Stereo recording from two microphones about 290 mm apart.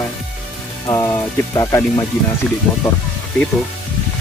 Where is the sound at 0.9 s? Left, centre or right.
Centre.